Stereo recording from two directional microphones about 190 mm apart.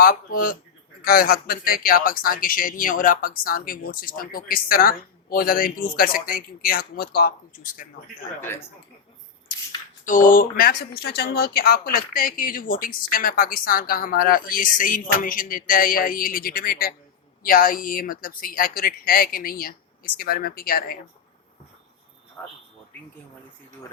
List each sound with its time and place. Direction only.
0.0 s speech: 50° left (ahead or behind)
8.4 s speech: 10° left (ahead or behind)
10.0 s speech: 45° left (ahead or behind)
22.4 s a man's voice: 10° left (ahead or behind)